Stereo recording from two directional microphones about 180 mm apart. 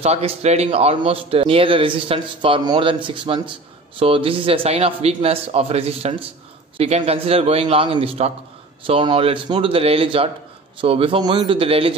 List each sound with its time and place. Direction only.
0.0 s a man's voice: 35° right (ahead or behind)